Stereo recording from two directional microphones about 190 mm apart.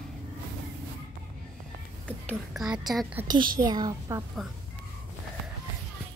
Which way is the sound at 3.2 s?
20° right (ahead or behind).